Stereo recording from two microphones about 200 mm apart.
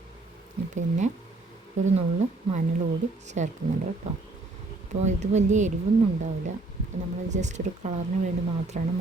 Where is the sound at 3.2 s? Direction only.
35° right (ahead or behind).